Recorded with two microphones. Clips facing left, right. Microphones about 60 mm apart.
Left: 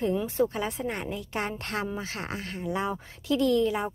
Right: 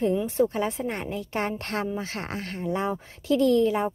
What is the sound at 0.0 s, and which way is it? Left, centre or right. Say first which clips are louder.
Speech: right 3 dB; right.